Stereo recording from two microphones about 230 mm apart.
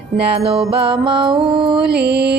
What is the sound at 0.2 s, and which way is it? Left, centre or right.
Speech, right.